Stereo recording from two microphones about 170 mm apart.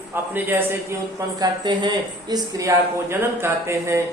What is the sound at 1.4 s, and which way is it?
Speech, 25° right (ahead or behind).